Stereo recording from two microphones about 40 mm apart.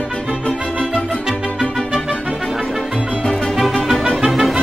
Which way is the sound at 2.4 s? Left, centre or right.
Centre.